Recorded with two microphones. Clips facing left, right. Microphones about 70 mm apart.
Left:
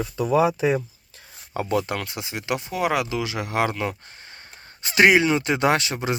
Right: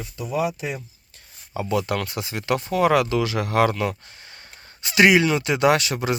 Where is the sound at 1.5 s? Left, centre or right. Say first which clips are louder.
Even; left.